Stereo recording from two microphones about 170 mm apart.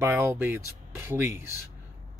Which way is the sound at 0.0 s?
10° right (ahead or behind).